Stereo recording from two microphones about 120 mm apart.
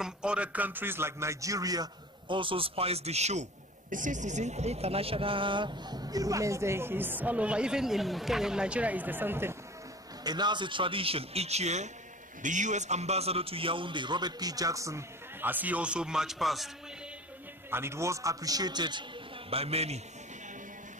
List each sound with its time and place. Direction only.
0.0 s speech: 10° right (ahead or behind); by 3.4 s 65° right (ahead or behind)
3.9 s speech: 90° right; by 9.6 s 20° right (ahead or behind)
10.2 s a man's voice: 35° right (ahead or behind); by 11.9 s 70° right (ahead or behind)
12.4 s a man's voice: 90° right; by 15.0 s 25° right (ahead or behind)
15.4 s speech: 15° right (ahead or behind)
17.6 s speech: 20° right (ahead or behind); by 19.0 s 40° right (ahead or behind)
19.5 s a man's voice: 55° right (ahead or behind)